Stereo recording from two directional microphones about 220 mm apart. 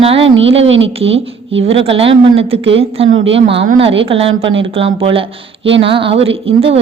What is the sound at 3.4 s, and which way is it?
A woman's voice, 25° right (ahead or behind).